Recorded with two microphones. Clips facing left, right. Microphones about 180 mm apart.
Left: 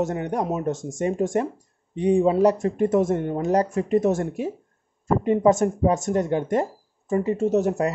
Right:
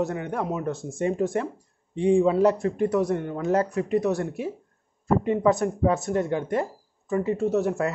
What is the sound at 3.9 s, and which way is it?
Speech, 45° left (ahead or behind).